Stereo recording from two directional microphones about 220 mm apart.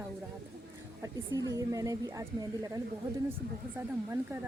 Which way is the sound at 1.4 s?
15° right (ahead or behind).